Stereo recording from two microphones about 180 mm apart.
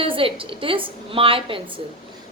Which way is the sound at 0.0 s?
30° right (ahead or behind).